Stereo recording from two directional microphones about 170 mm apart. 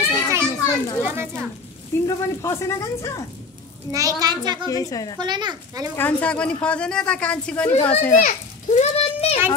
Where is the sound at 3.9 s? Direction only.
20° right (ahead or behind).